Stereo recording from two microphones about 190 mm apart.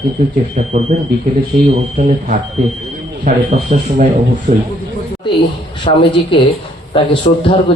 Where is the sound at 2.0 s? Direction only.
40° right (ahead or behind).